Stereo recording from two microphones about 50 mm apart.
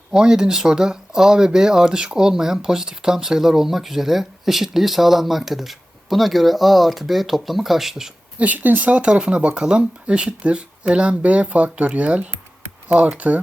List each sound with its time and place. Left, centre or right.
0.1 s speech: centre
8.4 s speech: right
9.0 s speech: centre